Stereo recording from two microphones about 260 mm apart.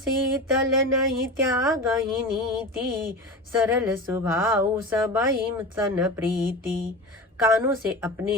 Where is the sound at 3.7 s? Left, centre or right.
Centre.